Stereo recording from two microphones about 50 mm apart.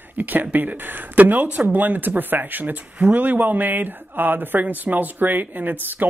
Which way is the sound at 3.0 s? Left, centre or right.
Right.